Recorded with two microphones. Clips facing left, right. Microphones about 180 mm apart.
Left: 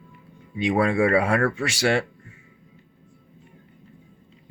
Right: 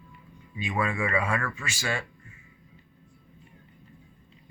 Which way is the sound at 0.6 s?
80° left.